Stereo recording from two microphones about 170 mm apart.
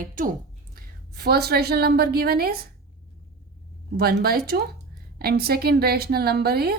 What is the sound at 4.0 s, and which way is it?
A woman's voice, 65° right (ahead or behind).